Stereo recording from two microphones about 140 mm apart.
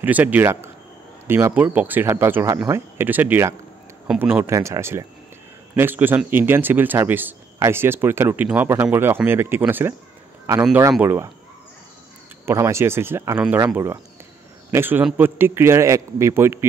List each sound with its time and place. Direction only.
0.0 s speech: 10° right (ahead or behind)
12.4 s speech: 20° right (ahead or behind)
14.7 s speech: 15° right (ahead or behind)